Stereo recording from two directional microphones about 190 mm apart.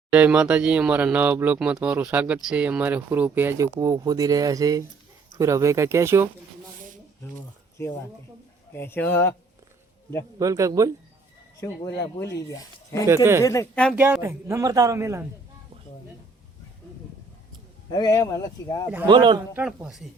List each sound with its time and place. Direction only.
0.1 s speech: 5° right (ahead or behind)
8.7 s speech: 10° left (ahead or behind)
10.3 s speech: 20° right (ahead or behind)
11.6 s speech: 15° left (ahead or behind)
13.9 s speech: 10° right (ahead or behind)
17.9 s speech: 20° left (ahead or behind)
19.0 s a man's voice: 25° right (ahead or behind)
19.5 s a woman's voice: 5° right (ahead or behind)